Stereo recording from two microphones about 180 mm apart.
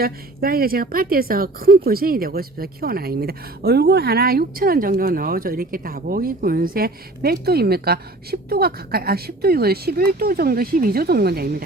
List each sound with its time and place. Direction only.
0.0 s a woman's voice: 55° right (ahead or behind)